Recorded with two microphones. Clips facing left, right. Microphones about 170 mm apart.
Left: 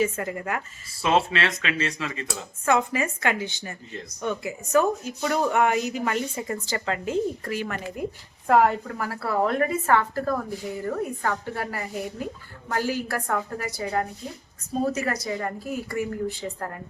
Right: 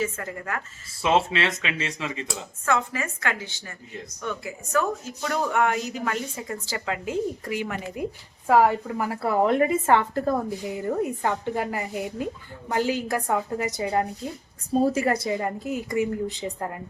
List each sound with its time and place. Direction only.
0.0 s a woman's voice: 15° left (ahead or behind)
0.9 s a woman's voice: 20° right (ahead or behind)
2.6 s a woman's voice: 15° left (ahead or behind)
5.2 s a woman's voice: 5° left (ahead or behind); by 16.6 s 20° right (ahead or behind)